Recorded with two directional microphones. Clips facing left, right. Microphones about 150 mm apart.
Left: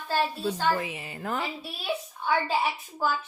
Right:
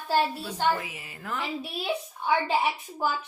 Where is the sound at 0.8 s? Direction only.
25° left (ahead or behind).